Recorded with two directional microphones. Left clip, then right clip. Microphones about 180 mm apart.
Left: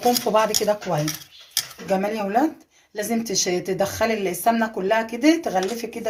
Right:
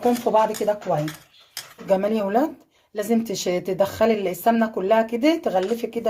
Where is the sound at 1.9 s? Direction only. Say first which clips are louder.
Right 3 dB; 55° right (ahead or behind).